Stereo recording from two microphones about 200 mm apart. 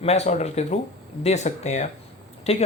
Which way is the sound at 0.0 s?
35° left (ahead or behind).